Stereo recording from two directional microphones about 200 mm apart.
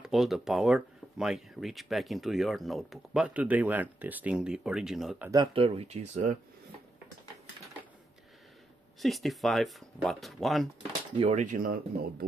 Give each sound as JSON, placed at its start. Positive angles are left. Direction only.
{"t": 0.0, "sound": "speech", "side_deg": 0}
{"t": 5.3, "sound": "speech", "side_deg": -25}
{"t": 9.0, "sound": "speech", "side_deg": 0}
{"t": 10.8, "sound": "speech", "side_deg": -30}